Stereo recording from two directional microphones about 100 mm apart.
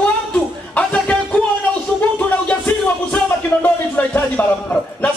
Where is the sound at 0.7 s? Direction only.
10° left (ahead or behind).